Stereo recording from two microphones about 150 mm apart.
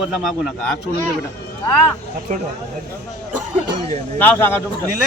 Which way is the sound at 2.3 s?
60° right (ahead or behind).